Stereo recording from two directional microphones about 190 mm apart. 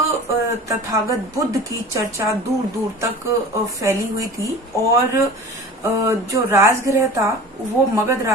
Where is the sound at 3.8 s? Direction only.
15° right (ahead or behind).